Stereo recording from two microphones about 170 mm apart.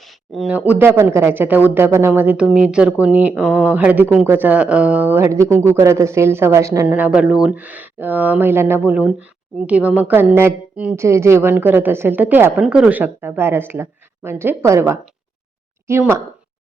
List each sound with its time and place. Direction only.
0.3 s speech: 10° right (ahead or behind)